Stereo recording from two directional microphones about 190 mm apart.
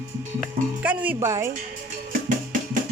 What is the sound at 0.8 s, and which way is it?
Speech, 10° right (ahead or behind).